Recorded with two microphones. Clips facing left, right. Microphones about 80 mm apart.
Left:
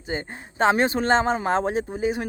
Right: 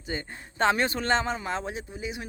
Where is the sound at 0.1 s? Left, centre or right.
Left.